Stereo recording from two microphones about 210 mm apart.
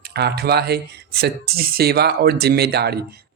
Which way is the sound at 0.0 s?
50° right (ahead or behind).